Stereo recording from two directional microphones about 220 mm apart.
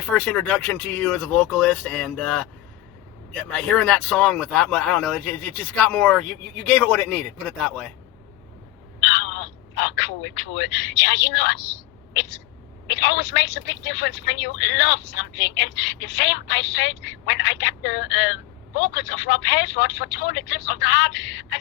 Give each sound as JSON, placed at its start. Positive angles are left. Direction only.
{"t": 0.0, "sound": "speech", "side_deg": 5}
{"t": 3.5, "sound": "speech", "side_deg": 0}
{"t": 9.0, "sound": "speech", "side_deg": 55}
{"t": 12.9, "sound": "speech", "side_deg": 55}